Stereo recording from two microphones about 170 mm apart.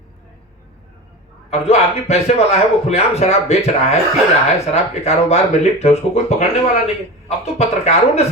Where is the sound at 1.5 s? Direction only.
40° left (ahead or behind).